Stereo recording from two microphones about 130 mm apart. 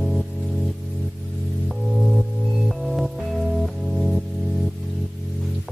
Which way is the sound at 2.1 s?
Centre (ahead or behind).